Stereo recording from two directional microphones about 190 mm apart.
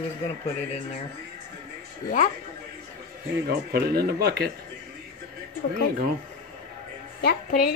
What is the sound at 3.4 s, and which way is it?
Speech, 55° right (ahead or behind).